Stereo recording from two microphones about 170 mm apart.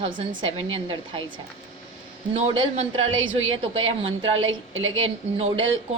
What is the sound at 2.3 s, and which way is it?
A woman's voice, 35° right (ahead or behind).